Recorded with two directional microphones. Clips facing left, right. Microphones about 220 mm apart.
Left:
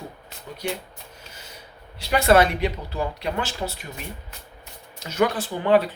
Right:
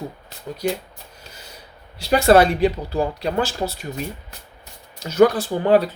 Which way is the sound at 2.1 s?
35° right (ahead or behind).